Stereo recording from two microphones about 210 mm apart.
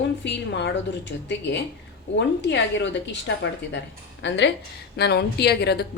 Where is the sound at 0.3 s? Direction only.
55° left (ahead or behind).